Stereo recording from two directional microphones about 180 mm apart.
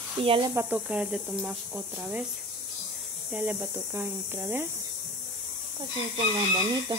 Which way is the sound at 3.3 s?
10° right (ahead or behind).